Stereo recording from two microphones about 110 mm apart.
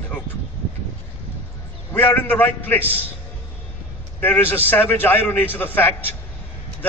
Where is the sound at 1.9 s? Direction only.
20° left (ahead or behind).